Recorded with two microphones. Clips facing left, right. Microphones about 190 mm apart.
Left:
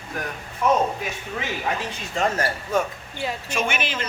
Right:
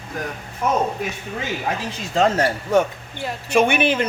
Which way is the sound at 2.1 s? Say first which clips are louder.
Right 6 dB; 85° right.